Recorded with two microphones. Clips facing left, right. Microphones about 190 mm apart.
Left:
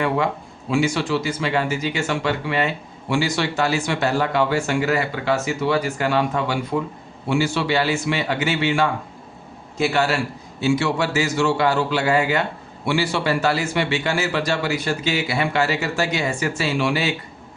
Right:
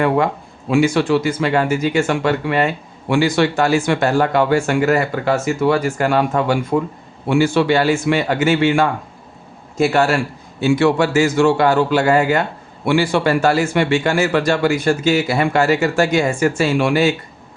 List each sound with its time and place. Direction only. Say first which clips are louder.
0.7 s speech: right 6 dB; 55° right (ahead or behind)